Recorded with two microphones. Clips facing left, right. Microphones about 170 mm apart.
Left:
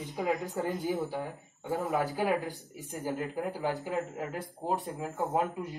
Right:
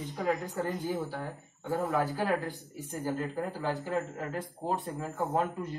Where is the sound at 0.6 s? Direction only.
10° left (ahead or behind).